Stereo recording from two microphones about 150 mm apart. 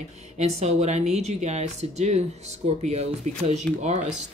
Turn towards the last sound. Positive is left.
turn(degrees=-50)  # may be behind; listen again after turning